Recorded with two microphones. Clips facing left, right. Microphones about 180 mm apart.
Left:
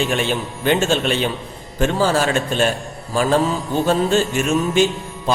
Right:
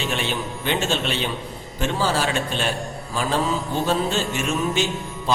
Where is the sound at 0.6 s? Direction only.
50° left (ahead or behind).